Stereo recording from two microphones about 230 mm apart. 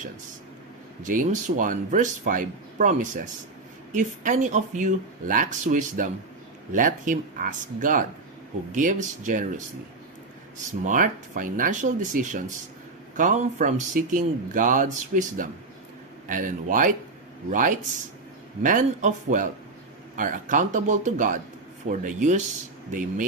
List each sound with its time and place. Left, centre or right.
1.0 s speech: right
10.7 s speech: right